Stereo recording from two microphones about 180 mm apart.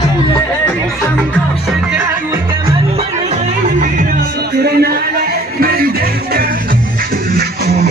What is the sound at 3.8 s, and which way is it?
Music, 50° right (ahead or behind).